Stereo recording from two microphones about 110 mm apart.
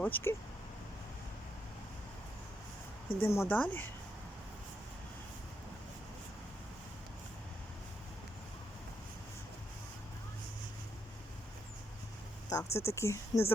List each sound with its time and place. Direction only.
0.0 s speech: 20° left (ahead or behind)
3.2 s speech: 25° left (ahead or behind)
12.5 s speech: 30° left (ahead or behind)